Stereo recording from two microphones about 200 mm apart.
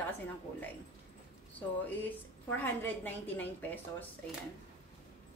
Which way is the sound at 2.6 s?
10° left (ahead or behind).